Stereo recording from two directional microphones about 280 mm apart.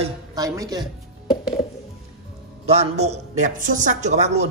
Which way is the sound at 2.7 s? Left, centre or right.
Right.